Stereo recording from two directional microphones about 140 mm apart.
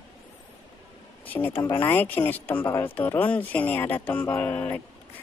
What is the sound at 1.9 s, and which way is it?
A woman's voice, 15° left (ahead or behind).